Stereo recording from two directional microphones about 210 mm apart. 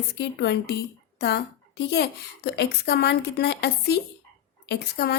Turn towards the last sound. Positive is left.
turn(degrees=50)  # may be behind; listen again after turning